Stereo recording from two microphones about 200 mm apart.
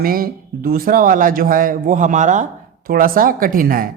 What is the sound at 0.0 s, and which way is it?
Speech, 45° right (ahead or behind).